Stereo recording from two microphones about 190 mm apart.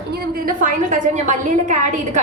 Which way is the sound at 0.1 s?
50° right (ahead or behind).